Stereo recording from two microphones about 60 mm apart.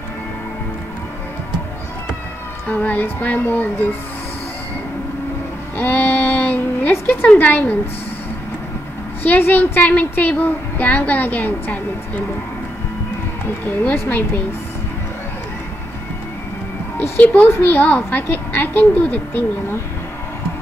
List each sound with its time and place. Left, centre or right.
2.7 s a woman's voice: left
5.8 s a sound: left
7.3 s speech: left
9.2 s a woman's voice: left
13.7 s speech: left
17.2 s speech: left